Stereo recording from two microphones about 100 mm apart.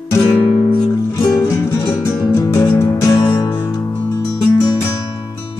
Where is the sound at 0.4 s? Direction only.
80° left.